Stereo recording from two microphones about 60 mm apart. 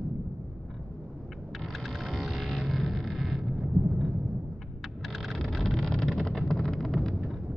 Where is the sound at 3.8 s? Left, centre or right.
Right.